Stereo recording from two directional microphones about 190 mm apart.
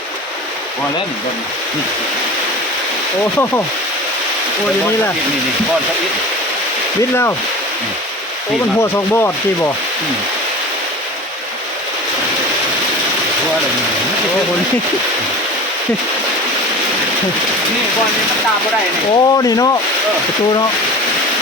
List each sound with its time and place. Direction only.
8.8 s speech: 15° left (ahead or behind)
19.1 s speech: 20° left (ahead or behind)